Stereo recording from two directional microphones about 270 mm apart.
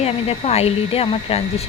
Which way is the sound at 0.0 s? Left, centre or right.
Left.